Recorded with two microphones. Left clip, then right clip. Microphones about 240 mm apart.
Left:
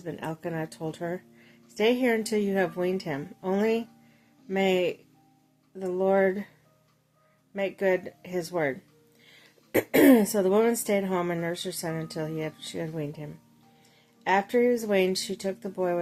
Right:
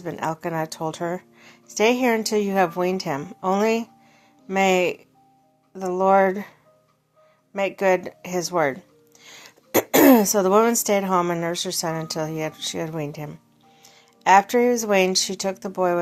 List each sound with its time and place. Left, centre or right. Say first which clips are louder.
0.0 s speech: right 8 dB; centre
7.5 s a woman's voice: right 6 dB; centre